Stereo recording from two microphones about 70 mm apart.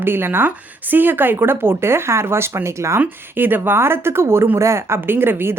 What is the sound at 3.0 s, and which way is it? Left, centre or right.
A woman's voice, right.